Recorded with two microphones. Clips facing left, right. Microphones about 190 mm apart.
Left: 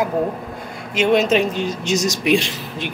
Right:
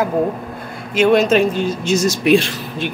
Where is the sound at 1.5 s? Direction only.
15° left (ahead or behind).